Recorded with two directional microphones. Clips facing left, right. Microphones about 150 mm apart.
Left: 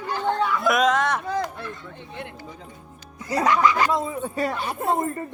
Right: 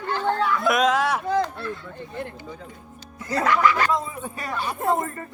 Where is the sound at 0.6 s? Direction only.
Centre (ahead or behind).